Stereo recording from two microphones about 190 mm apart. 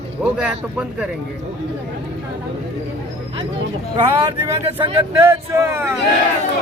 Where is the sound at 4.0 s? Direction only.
25° right (ahead or behind).